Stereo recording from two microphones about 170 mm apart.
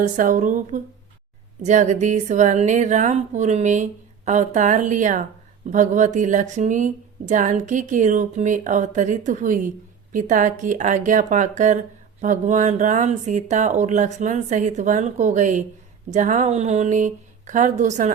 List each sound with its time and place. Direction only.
0.0 s a woman's voice: 50° right (ahead or behind)